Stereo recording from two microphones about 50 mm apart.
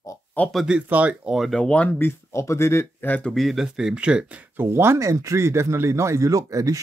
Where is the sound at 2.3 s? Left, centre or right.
Left.